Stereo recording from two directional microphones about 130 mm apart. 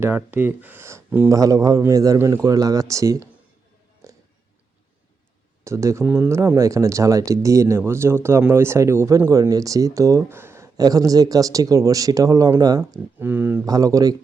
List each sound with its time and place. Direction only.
0.0 s speech: 15° right (ahead or behind)
4.0 s music: 25° right (ahead or behind)
5.6 s speech: 20° right (ahead or behind)
13.1 s speech: 15° right (ahead or behind)
13.7 s speech: 25° right (ahead or behind)